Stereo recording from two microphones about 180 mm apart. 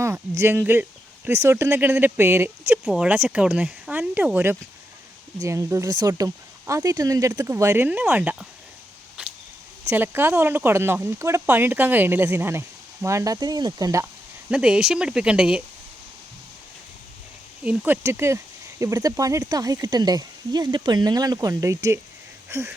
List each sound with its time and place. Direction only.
0.0 s speech: 15° right (ahead or behind)
9.2 s a sound: 5° right (ahead or behind)
9.8 s speech: 10° right (ahead or behind)
14.5 s speech: 5° right (ahead or behind)
17.6 s speech: 10° right (ahead or behind)
22.4 s a sound: 15° right (ahead or behind)